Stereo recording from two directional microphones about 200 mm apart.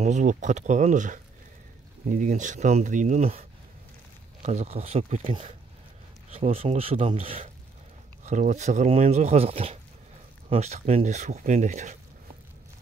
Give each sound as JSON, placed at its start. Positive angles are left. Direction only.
{"t": 0.0, "sound": "speech", "side_deg": -40}
{"t": 6.3, "sound": "speech", "side_deg": -30}